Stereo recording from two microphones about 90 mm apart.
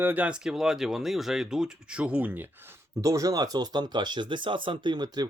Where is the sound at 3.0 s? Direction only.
40° right (ahead or behind).